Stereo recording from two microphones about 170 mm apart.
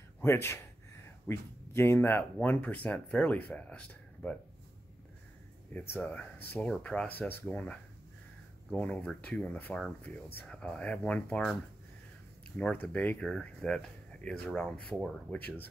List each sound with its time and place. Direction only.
0.2 s speech: 15° left (ahead or behind)
5.7 s speech: 10° left (ahead or behind)
12.5 s speech: 5° left (ahead or behind)